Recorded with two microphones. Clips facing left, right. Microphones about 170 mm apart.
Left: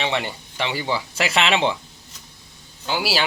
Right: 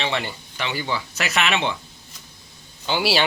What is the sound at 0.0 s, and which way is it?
Speech, 20° left (ahead or behind).